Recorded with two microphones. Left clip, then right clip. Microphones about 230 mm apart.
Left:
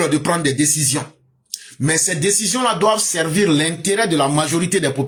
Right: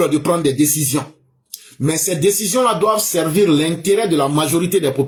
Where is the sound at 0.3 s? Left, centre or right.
Left.